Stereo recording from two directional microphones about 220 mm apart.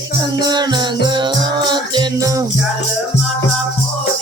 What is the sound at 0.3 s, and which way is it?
Music, 20° right (ahead or behind).